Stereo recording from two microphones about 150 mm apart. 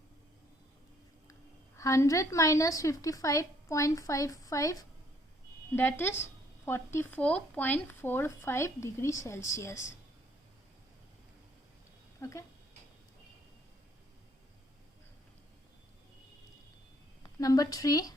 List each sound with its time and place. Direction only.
1.3 s a woman's voice: 20° left (ahead or behind)
12.2 s speech: 20° left (ahead or behind)
17.2 s a woman's voice: 25° left (ahead or behind)